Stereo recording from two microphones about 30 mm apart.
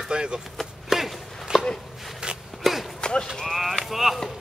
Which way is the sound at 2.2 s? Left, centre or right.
Right.